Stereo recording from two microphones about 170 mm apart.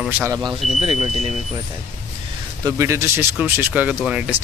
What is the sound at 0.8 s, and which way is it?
Speech, 30° right (ahead or behind).